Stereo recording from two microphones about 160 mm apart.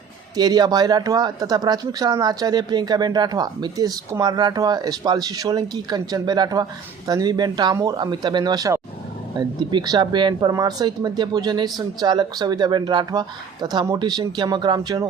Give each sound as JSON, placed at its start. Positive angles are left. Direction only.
{"t": 0.3, "sound": "speech", "side_deg": -25}